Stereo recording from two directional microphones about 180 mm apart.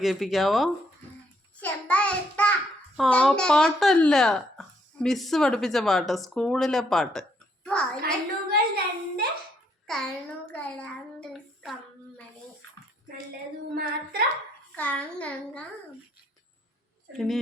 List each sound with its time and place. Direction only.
0.0 s speech: centre (ahead or behind)
1.6 s child singing: 5° left (ahead or behind)
3.0 s speech: 5° left (ahead or behind)
8.4 s a sound: 60° right (ahead or behind)
9.8 s a sound: 5° left (ahead or behind)
13.7 s child singing: 55° right (ahead or behind)
14.8 s a child's voice: 10° left (ahead or behind)
17.2 s speech: centre (ahead or behind)